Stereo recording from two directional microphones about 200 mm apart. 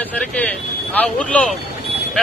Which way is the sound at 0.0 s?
5° left (ahead or behind).